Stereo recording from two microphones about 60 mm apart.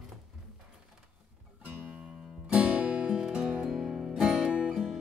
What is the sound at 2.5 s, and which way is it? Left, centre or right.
Music, right.